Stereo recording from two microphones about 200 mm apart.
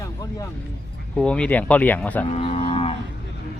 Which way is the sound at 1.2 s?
5° left (ahead or behind).